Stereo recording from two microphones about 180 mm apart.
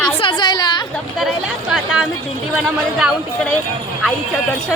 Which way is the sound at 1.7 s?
5° right (ahead or behind).